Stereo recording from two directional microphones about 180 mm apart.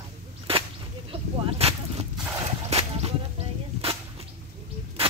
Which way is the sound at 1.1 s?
30° right (ahead or behind).